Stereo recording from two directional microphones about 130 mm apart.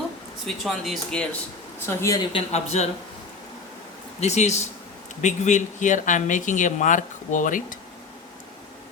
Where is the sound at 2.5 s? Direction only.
60° left (ahead or behind).